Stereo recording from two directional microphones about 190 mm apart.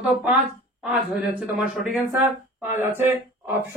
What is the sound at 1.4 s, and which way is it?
A woman's voice, 5° right (ahead or behind).